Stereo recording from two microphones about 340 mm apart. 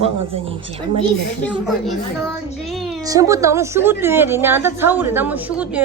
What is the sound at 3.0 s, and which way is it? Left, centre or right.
A woman's voice, centre.